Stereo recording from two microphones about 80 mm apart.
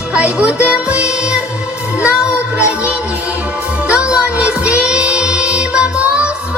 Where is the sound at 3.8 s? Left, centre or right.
Centre.